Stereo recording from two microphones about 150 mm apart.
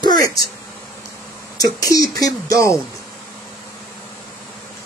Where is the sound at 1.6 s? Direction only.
25° left (ahead or behind).